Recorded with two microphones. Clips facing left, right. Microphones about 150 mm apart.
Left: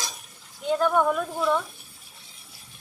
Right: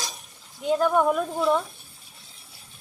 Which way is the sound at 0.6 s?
5° right (ahead or behind).